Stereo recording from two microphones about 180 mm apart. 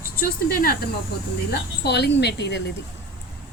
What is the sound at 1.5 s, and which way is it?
A woman's voice, 65° left (ahead or behind).